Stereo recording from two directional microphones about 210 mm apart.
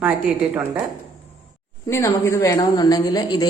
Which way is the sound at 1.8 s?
15° left (ahead or behind).